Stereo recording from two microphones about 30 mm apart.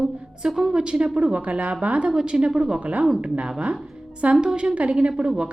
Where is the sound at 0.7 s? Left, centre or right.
Right.